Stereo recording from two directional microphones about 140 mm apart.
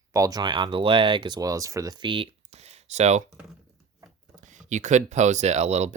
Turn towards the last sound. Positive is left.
turn(degrees=-50)  # may be behind; listen again after turning